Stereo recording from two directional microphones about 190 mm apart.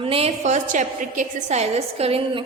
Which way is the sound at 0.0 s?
30° right (ahead or behind).